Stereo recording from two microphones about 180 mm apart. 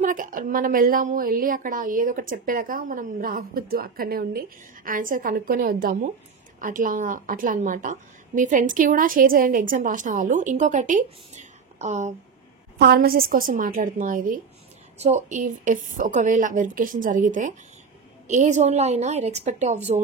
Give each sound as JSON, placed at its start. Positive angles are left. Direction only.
{"t": 0.0, "sound": "a woman's voice", "side_deg": -50}
{"t": 12.7, "sound": "a woman's voice", "side_deg": -60}